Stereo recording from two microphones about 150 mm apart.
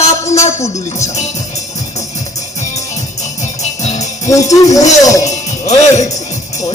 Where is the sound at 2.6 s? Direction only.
50° left (ahead or behind).